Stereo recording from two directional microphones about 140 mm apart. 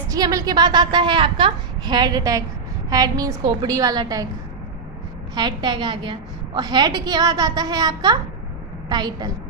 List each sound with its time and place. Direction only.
0.1 s a woman's voice: 25° right (ahead or behind)
5.3 s a woman's voice: 30° right (ahead or behind)